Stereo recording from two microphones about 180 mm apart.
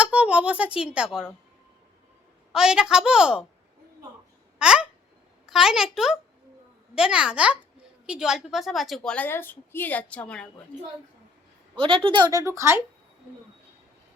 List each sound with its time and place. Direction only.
0.0 s speech: 5° right (ahead or behind)
2.5 s a woman's voice: 5° right (ahead or behind)
4.5 s babbling: 5° right (ahead or behind)
5.5 s a woman's voice: 5° right (ahead or behind)
11.8 s speech: 30° right (ahead or behind); by 12.8 s 15° right (ahead or behind)